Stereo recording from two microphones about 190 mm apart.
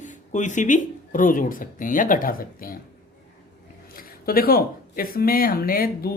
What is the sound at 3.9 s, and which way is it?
Speech, 50° left (ahead or behind).